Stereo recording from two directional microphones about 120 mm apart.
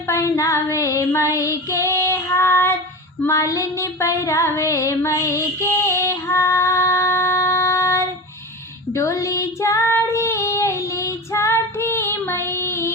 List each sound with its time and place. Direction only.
0.1 s child singing: 25° left (ahead or behind)